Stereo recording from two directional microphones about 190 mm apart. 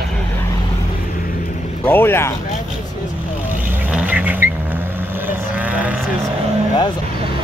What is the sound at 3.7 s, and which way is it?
Vehicle, 5° right (ahead or behind).